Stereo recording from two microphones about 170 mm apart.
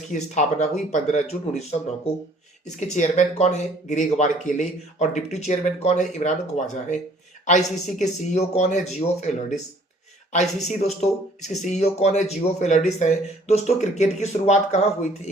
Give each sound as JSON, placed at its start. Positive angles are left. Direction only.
{"t": 0.1, "sound": "speech", "side_deg": 45}
{"t": 2.6, "sound": "speech", "side_deg": 40}
{"t": 10.3, "sound": "speech", "side_deg": 40}